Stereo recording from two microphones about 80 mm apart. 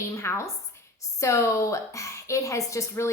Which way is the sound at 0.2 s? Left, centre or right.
Left.